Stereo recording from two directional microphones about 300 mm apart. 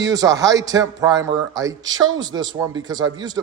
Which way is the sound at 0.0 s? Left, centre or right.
Centre.